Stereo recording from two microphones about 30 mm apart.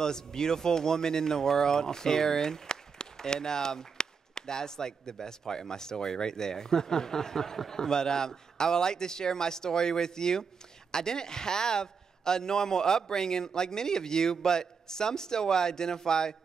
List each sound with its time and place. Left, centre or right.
0.0 s speech: centre